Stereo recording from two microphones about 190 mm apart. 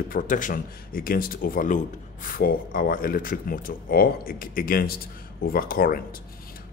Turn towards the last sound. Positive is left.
turn(degrees=50)  # may be behind; listen again after turning